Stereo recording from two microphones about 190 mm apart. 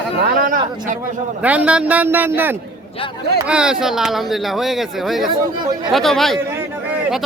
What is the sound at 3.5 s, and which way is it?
Speech, 5° right (ahead or behind).